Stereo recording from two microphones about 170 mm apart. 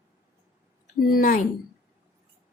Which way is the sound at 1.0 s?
55° left (ahead or behind).